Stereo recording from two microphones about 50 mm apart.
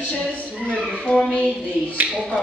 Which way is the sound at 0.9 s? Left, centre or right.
Centre.